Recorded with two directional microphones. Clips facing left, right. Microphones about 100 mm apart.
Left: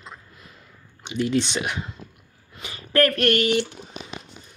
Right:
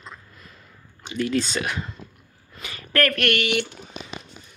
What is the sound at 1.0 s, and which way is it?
Speech, 20° left (ahead or behind).